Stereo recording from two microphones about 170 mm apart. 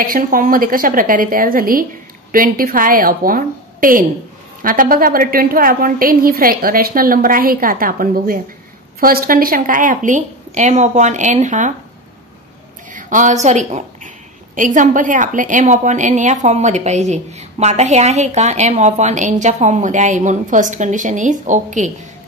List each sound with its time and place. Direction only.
0.0 s a woman's voice: 55° right (ahead or behind)
12.9 s a woman's voice: 45° right (ahead or behind)